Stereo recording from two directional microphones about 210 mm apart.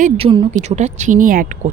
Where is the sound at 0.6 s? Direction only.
35° right (ahead or behind).